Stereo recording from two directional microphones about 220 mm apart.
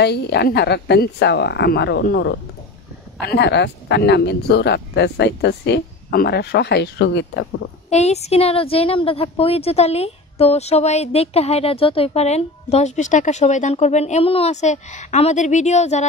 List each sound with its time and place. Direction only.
0.0 s speech: 50° left (ahead or behind)
7.9 s a woman's voice: 30° left (ahead or behind)